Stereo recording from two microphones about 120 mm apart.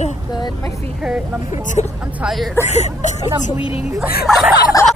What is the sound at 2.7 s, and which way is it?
Speech, 70° left (ahead or behind).